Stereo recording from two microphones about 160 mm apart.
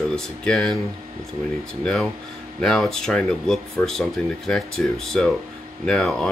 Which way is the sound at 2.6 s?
5° left (ahead or behind).